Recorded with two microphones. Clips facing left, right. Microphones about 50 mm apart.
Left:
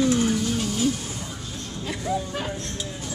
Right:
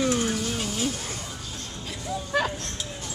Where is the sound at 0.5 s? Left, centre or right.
Centre.